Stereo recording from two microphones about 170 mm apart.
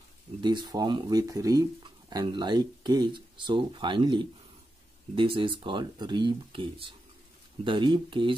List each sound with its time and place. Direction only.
0.4 s speech: 25° right (ahead or behind)